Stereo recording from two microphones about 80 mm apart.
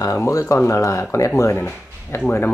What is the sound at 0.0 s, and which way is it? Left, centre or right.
Speech, left.